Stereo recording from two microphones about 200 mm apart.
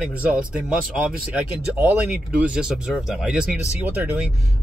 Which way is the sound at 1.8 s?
5° right (ahead or behind).